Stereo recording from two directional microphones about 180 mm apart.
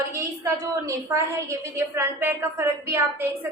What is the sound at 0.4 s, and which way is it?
A woman's voice, 15° right (ahead or behind).